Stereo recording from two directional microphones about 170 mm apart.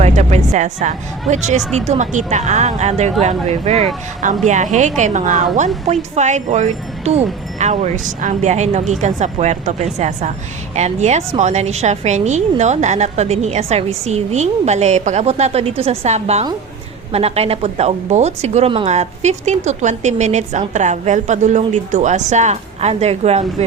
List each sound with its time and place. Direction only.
0.0 s a woman's voice: 40° right (ahead or behind)